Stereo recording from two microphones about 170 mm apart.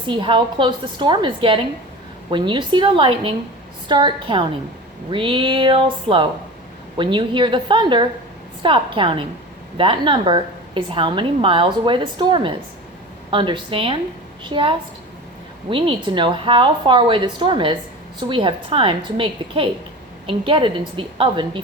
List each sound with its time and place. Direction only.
0.1 s a woman's voice: 30° right (ahead or behind)